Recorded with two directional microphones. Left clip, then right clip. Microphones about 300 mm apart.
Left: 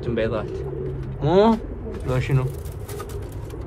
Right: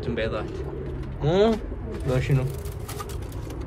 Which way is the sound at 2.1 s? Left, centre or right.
Centre.